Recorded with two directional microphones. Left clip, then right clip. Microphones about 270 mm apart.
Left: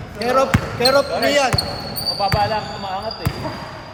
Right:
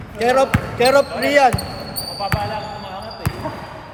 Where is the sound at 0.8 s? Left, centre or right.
Right.